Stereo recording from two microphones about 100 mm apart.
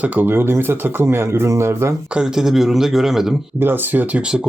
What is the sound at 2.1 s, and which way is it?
Speech, 5° right (ahead or behind).